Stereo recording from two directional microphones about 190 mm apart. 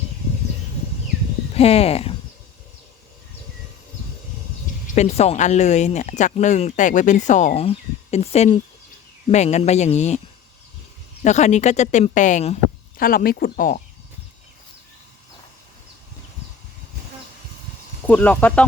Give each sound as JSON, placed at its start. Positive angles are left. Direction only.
{"t": 1.5, "sound": "speech", "side_deg": 30}
{"t": 4.9, "sound": "speech", "side_deg": 35}
{"t": 11.2, "sound": "speech", "side_deg": 40}
{"t": 13.0, "sound": "speech", "side_deg": 50}
{"t": 18.0, "sound": "speech", "side_deg": 10}